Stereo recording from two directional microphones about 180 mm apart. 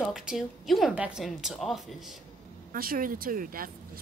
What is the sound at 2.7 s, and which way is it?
Speech, 55° right (ahead or behind).